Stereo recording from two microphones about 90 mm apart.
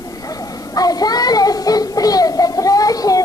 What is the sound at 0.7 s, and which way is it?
Child singing, 45° left (ahead or behind).